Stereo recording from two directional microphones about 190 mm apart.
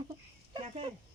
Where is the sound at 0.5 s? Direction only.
30° right (ahead or behind).